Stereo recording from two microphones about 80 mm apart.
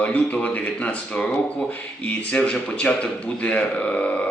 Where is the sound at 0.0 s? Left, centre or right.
Centre.